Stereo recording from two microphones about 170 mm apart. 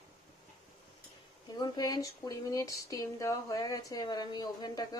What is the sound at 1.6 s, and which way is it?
Speech, 20° left (ahead or behind).